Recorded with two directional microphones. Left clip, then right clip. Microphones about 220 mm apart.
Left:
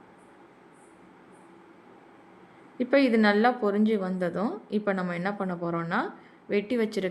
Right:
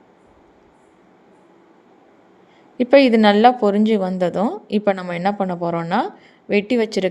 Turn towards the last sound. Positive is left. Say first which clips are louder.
# right 9 dB
turn(degrees=-30)  # may be behind; listen again after turning